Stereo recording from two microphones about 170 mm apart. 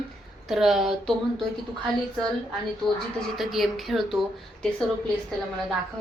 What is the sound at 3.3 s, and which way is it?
Speech, centre (ahead or behind).